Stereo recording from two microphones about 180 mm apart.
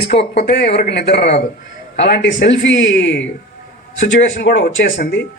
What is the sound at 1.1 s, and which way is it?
Speech, 35° left (ahead or behind).